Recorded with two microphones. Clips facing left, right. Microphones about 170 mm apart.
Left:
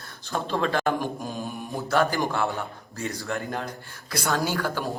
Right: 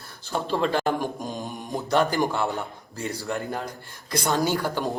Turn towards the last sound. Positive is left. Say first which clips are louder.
# right 2 dB
turn(degrees=-15)  # may be behind; listen again after turning